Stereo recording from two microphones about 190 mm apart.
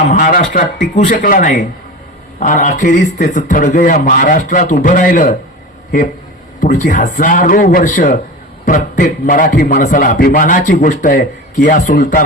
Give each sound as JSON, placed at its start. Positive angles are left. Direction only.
{"t": 0.1, "sound": "a man's voice", "side_deg": 50}
{"t": 6.6, "sound": "a man's voice", "side_deg": 45}